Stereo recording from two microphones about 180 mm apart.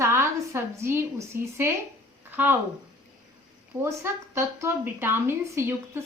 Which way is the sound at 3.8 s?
15° right (ahead or behind).